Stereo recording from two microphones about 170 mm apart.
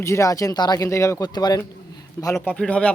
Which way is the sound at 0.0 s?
15° left (ahead or behind).